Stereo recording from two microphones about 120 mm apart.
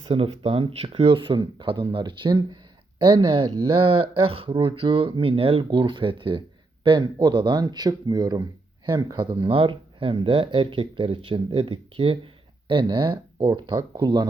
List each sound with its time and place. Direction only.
0.0 s speech: 50° right (ahead or behind); by 14.3 s 35° right (ahead or behind)